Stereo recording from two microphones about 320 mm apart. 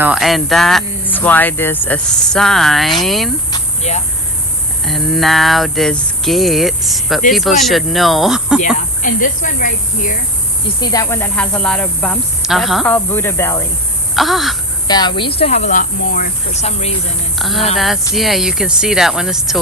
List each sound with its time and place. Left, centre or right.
0.0 s speech: centre
3.5 s a sound: left
4.9 s speech: centre
8.6 s speech: left
10.8 s speech: centre
14.8 s speech: centre
17.3 s speech: centre